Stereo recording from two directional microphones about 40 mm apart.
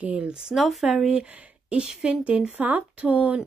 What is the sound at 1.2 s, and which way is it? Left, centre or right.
Speech, right.